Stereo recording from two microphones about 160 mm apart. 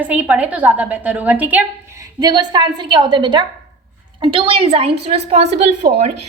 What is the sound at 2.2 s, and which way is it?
A woman's voice, 25° right (ahead or behind).